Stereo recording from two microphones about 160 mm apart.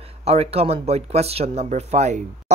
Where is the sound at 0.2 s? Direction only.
40° right (ahead or behind).